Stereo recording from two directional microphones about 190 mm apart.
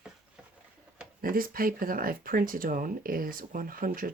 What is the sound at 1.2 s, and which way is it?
Speech, 50° right (ahead or behind).